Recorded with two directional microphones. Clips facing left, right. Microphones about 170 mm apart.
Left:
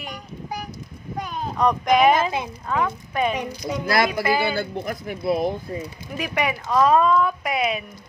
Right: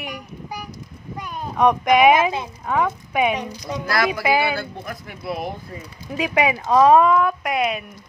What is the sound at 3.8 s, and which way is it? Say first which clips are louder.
Speech: even; 25° left (ahead or behind).